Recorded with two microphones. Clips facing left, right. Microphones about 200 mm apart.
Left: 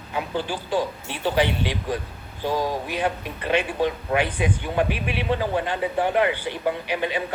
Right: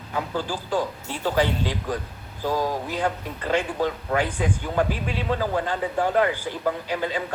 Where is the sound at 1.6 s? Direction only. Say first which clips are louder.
Left 1 dB; 20° left (ahead or behind).